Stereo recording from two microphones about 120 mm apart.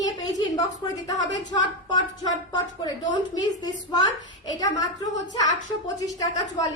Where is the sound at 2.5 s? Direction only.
35° left (ahead or behind).